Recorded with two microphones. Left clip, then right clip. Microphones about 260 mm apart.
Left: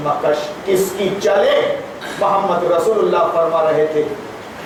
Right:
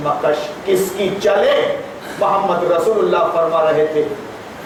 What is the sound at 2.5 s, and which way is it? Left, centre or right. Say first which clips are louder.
A man's voice: even; left.